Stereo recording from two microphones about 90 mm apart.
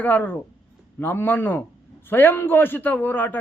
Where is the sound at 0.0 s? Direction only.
20° left (ahead or behind).